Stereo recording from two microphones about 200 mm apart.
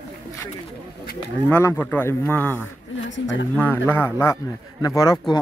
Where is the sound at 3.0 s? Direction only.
65° left (ahead or behind).